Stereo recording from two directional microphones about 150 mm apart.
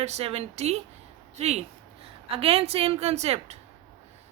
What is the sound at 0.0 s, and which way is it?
A woman's voice, 45° right (ahead or behind).